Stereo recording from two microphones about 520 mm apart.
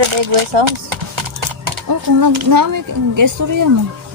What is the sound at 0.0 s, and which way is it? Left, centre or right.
Horse, right.